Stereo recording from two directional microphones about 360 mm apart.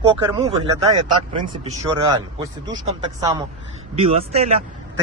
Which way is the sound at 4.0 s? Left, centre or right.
Centre.